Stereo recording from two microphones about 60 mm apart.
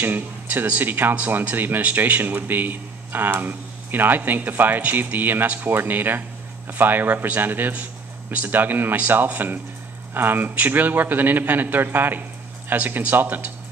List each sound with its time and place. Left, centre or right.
0.0 s speech: right